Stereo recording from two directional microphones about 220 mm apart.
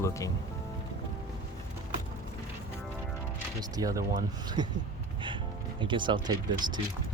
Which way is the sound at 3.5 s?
15° right (ahead or behind).